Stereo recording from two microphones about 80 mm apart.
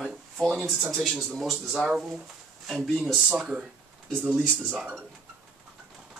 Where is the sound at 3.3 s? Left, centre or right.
Centre.